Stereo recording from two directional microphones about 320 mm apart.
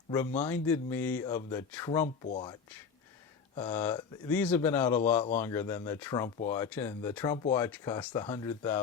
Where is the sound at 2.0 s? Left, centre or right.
Centre.